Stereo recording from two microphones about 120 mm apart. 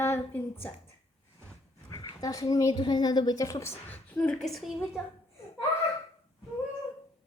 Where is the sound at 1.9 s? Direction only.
30° left (ahead or behind); by 4.7 s centre (ahead or behind).